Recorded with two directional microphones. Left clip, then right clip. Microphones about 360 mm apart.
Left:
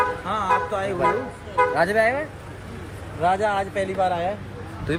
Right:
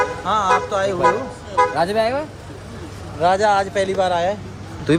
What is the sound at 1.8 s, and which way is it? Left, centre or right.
Speech, centre.